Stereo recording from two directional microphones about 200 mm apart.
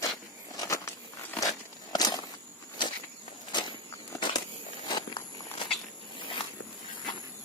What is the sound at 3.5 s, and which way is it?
Walk, 20° left (ahead or behind).